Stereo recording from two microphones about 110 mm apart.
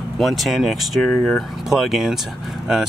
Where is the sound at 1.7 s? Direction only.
Centre (ahead or behind).